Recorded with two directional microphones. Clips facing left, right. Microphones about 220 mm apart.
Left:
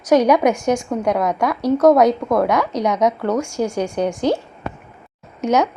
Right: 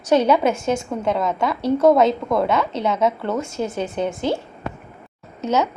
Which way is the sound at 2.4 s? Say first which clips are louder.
Left 2 dB; 15° left (ahead or behind).